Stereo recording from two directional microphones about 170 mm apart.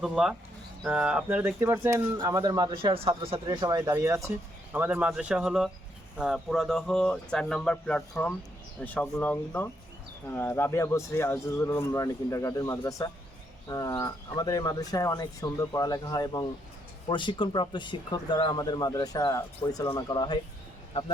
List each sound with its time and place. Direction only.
0.0 s speech: 5° right (ahead or behind); by 20.4 s 25° left (ahead or behind)